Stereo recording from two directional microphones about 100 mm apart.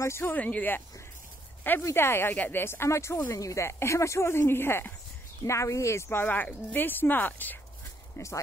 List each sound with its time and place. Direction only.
0.0 s speech: 25° left (ahead or behind)